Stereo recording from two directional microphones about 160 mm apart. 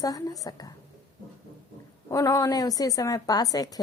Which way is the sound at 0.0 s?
20° left (ahead or behind).